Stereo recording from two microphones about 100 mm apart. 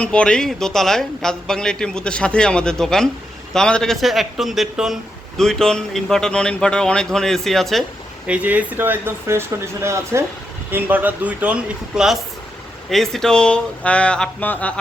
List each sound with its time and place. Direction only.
0.0 s a man's voice: 10° left (ahead or behind)
8.3 s speech: 15° right (ahead or behind)
12.9 s a man's voice: 5° left (ahead or behind)